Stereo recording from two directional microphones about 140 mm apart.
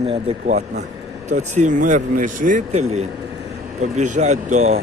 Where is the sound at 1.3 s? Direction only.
55° right (ahead or behind).